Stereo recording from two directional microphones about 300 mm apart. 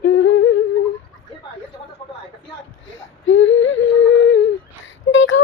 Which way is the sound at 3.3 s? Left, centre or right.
Left.